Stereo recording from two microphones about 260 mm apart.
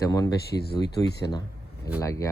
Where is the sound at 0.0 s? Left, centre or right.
Centre.